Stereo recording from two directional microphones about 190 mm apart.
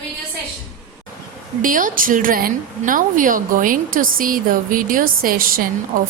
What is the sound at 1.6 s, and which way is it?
A woman's voice, 45° right (ahead or behind).